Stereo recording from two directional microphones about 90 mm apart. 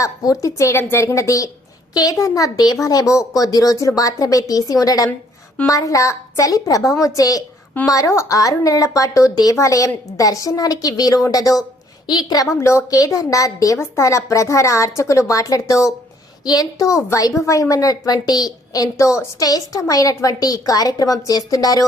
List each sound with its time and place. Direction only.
0.0 s a woman's voice: 40° left (ahead or behind)
12.5 s a woman's voice: 35° left (ahead or behind)